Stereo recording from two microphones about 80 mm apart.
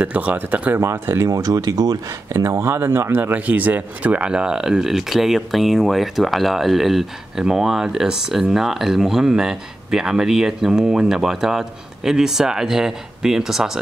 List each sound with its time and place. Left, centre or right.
0.0 s speech: centre
1.2 s speech: right; by 13.7 s centre